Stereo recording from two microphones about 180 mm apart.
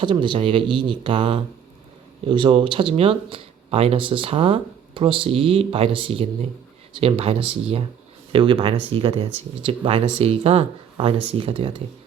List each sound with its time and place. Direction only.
0.0 s speech: 25° right (ahead or behind)